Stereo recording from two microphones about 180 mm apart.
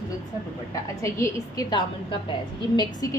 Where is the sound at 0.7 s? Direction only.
15° left (ahead or behind).